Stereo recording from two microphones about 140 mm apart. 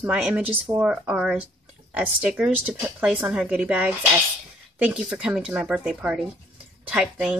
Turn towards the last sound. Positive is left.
turn(degrees=-5)  # may be behind; listen again after turning